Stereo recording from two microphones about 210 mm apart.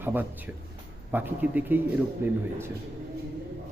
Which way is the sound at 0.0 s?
10° right (ahead or behind).